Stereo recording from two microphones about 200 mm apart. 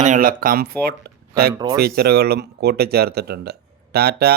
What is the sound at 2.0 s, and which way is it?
Speech, 50° right (ahead or behind).